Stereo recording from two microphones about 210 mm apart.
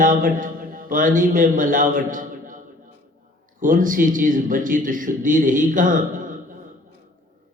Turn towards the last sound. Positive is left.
turn(degrees=-40)  # may be behind; listen again after turning